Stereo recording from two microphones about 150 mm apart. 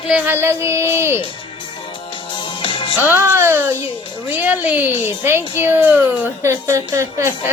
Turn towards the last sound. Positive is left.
turn(degrees=-20)  # may be behind; listen again after turning